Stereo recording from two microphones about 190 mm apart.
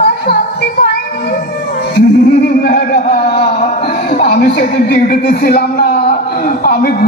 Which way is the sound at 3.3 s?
30° left (ahead or behind).